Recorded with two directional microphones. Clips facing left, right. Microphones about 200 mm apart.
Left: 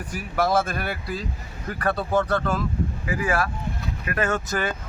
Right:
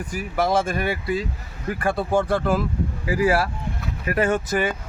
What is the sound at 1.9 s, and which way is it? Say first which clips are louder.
Speech: right 1 dB; 10° right (ahead or behind).